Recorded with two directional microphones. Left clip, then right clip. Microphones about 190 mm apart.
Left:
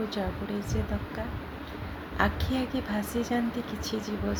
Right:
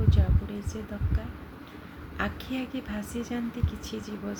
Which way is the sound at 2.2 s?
15° right (ahead or behind).